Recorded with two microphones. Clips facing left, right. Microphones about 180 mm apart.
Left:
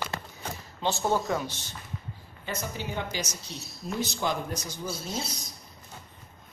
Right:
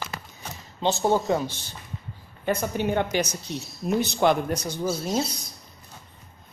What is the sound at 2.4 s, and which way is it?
Speech, 55° right (ahead or behind).